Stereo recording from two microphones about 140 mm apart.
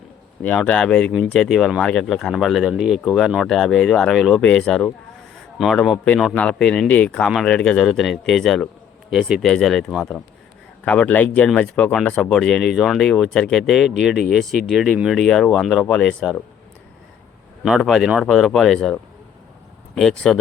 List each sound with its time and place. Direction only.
0.4 s speech: 10° left (ahead or behind)
6.3 s speech: 5° left (ahead or behind)
17.6 s speech: centre (ahead or behind)
20.0 s speech: 5° left (ahead or behind)